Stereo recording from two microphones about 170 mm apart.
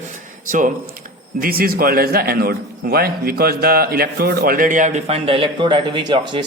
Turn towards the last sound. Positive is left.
turn(degrees=-25)  # may be behind; listen again after turning